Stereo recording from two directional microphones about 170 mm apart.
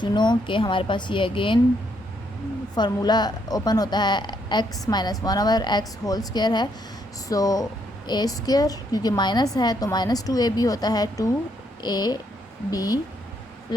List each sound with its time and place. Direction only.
0.0 s a woman's voice: 25° left (ahead or behind)
2.7 s a woman's voice: 25° left (ahead or behind)